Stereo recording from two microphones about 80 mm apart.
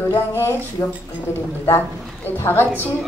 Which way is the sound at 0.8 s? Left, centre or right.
Left.